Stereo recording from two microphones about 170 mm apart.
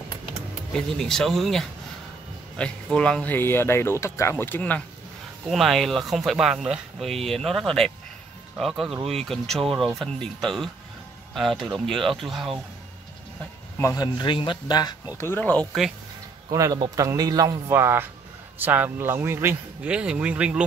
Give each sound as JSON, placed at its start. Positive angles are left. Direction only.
{"t": 0.7, "sound": "speech", "side_deg": 5}
{"t": 13.7, "sound": "a man's voice", "side_deg": 20}
{"t": 15.1, "sound": "speech", "side_deg": 15}
{"t": 16.5, "sound": "a man's voice", "side_deg": -20}